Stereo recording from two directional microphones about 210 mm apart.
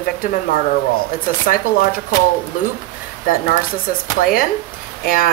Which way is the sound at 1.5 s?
45° left (ahead or behind).